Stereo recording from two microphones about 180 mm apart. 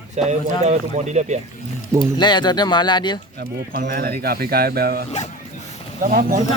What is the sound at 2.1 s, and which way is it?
Speech, 25° left (ahead or behind).